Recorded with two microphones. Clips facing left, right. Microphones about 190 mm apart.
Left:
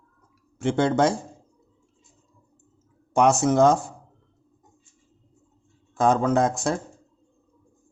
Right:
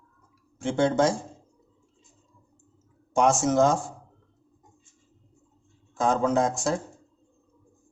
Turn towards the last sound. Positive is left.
turn(degrees=60)  # may be behind; listen again after turning